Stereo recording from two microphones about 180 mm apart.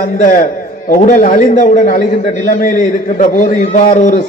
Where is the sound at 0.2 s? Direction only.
45° left (ahead or behind).